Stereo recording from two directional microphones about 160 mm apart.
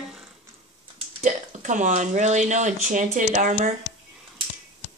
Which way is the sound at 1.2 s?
50° right (ahead or behind).